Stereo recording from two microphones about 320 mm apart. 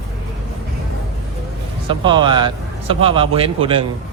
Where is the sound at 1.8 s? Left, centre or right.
Centre.